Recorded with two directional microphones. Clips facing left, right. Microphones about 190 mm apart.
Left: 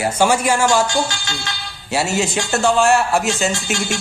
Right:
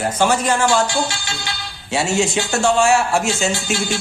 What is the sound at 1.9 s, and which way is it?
A man's voice, centre (ahead or behind).